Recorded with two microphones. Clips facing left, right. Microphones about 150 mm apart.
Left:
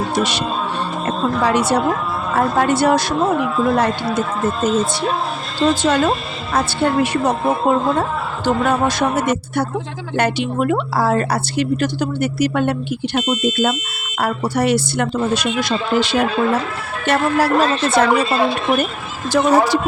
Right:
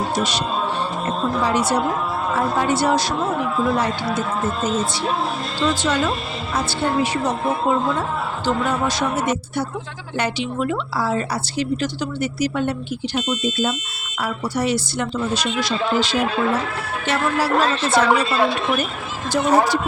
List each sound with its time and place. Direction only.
0.1 s a woman's voice: 65° left (ahead or behind)
5.5 s a woman's voice: 50° left (ahead or behind)
17.1 s a woman's voice: 50° left (ahead or behind)
19.3 s speech: 90° left